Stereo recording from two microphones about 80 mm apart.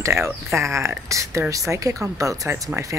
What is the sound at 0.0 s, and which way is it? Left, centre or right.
Speech, right.